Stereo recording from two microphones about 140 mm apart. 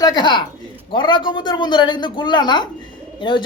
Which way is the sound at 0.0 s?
30° left (ahead or behind).